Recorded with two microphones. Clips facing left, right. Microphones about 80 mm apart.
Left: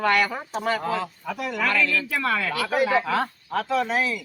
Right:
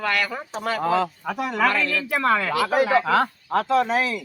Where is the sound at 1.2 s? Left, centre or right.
Right.